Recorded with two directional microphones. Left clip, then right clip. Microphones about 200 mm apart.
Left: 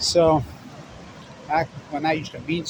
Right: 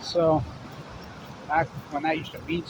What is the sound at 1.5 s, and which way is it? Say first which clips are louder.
Speech: left 2 dB; 35° left (ahead or behind).